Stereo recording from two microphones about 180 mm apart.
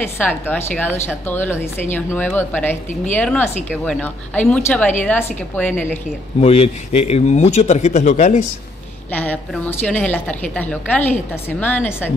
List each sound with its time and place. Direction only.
0.2 s a woman's voice: 10° left (ahead or behind)
6.4 s speech: 35° left (ahead or behind)
9.1 s a woman's voice: 10° left (ahead or behind)